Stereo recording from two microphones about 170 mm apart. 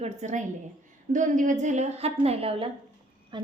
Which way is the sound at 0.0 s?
45° right (ahead or behind).